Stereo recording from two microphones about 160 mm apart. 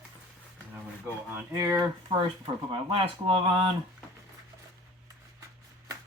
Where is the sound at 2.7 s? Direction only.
35° right (ahead or behind).